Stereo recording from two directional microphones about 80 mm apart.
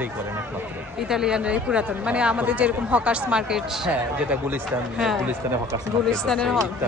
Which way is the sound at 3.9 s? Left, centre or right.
Centre.